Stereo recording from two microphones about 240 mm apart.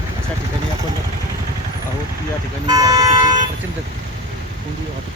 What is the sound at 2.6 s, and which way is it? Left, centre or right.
Vehicle, centre.